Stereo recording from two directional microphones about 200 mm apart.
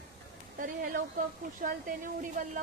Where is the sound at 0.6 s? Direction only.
40° right (ahead or behind).